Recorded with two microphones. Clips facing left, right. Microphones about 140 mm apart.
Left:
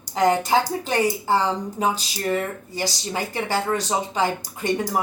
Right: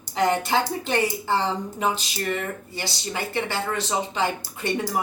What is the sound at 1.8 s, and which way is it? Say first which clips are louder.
Speech: left 2 dB; 40° left (ahead or behind).